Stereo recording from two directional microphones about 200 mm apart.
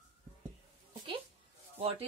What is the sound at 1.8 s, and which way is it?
Speech, 30° right (ahead or behind).